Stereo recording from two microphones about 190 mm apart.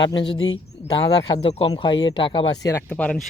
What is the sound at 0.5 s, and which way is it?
A man's voice, 20° left (ahead or behind).